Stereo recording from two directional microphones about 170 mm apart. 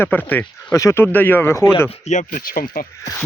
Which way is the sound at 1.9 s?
40° left (ahead or behind).